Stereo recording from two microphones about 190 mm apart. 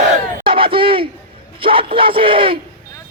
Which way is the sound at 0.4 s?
25° right (ahead or behind).